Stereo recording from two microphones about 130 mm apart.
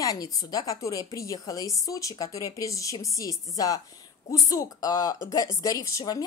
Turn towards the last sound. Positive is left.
turn(degrees=25)  # may be behind; listen again after turning